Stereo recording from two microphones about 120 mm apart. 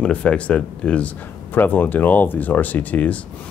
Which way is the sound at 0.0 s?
10° left (ahead or behind).